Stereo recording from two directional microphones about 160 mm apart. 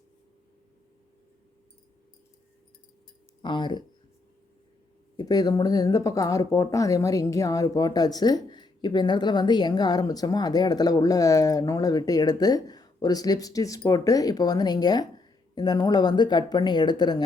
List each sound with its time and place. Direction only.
3.4 s speech: 30° left (ahead or behind)
5.1 s speech: 25° left (ahead or behind)